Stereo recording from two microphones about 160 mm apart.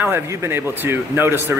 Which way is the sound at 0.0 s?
15° right (ahead or behind).